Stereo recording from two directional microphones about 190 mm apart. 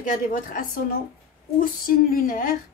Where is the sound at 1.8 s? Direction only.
50° left (ahead or behind).